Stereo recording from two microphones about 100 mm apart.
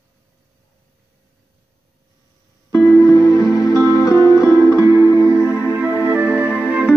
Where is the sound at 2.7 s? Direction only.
35° left (ahead or behind).